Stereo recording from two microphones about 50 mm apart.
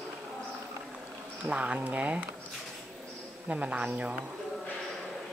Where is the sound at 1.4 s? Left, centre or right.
Right.